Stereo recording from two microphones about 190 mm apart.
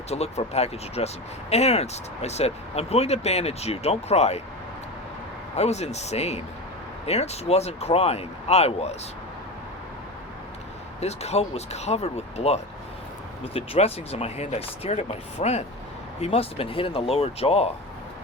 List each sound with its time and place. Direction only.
0.1 s speech: 35° left (ahead or behind)
5.5 s speech: 35° left (ahead or behind)
11.0 s speech: 35° left (ahead or behind)